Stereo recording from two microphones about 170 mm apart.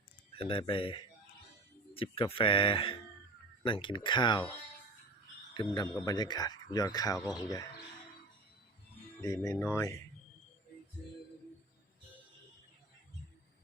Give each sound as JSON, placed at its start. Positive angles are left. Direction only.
{"t": 0.3, "sound": "speech", "side_deg": 30}
{"t": 5.5, "sound": "speech", "side_deg": 25}
{"t": 9.2, "sound": "speech", "side_deg": 20}